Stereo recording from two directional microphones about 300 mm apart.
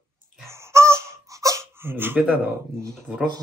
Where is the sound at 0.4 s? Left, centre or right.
Centre.